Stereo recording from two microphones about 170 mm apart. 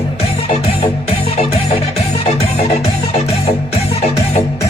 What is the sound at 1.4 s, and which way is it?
Music, 40° left (ahead or behind).